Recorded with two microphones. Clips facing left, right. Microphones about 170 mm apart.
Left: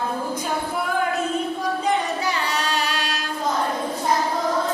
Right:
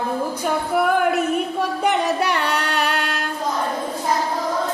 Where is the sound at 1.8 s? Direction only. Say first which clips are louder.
Right 5 dB; 70° right (ahead or behind).